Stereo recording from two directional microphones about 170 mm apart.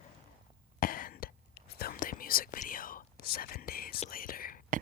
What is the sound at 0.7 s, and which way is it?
Whispering, 55° left (ahead or behind).